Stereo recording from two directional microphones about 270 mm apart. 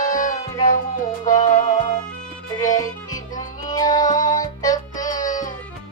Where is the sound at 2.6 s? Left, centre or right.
Centre.